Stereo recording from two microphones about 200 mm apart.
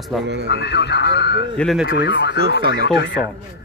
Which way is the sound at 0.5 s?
55° left (ahead or behind).